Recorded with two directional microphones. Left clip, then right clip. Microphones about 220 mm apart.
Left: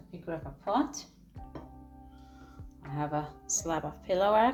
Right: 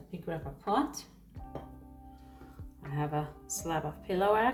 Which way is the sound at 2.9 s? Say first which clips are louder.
Left 1 dB; 40° left (ahead or behind).